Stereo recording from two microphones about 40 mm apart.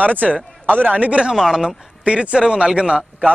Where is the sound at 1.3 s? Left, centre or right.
Centre.